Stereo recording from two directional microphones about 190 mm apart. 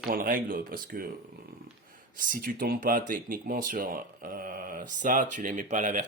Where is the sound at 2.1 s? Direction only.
45° right (ahead or behind).